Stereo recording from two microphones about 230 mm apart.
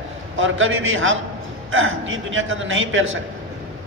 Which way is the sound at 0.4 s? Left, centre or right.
Right.